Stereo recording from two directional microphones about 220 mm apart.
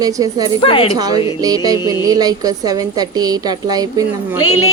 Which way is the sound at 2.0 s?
15° right (ahead or behind).